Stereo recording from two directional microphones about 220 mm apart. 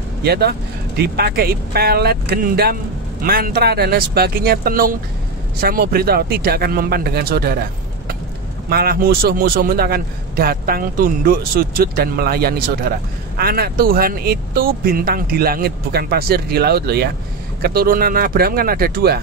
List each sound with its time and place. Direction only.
0.2 s speech: 45° right (ahead or behind)
8.6 s speech: 45° right (ahead or behind)